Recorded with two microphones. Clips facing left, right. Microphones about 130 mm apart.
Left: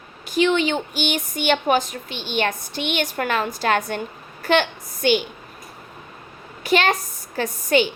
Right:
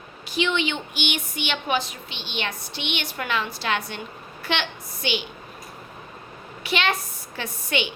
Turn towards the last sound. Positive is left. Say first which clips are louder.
# left 8 dB
turn(degrees=40)  # may be behind; listen again after turning